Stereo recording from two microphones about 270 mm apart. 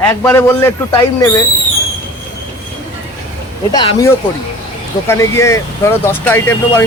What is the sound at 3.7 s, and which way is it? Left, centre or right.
Speech, centre.